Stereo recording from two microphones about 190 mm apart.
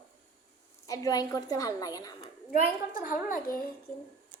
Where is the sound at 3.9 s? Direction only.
5° left (ahead or behind).